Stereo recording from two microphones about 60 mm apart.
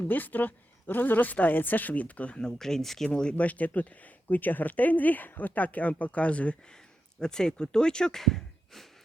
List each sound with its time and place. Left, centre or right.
0.0 s speech: left
2.6 s speech: centre
3.1 s speech: centre